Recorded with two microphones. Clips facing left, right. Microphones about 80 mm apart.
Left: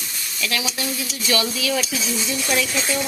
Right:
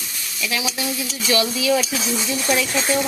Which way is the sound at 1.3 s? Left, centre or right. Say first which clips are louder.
Right 4 dB; centre.